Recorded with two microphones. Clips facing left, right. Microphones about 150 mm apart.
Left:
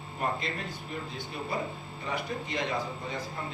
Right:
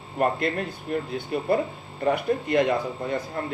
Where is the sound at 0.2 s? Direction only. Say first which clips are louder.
Right 9 dB; 60° right (ahead or behind).